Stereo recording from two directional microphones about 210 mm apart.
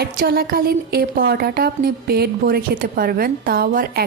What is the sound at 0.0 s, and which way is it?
A woman's voice, 45° right (ahead or behind).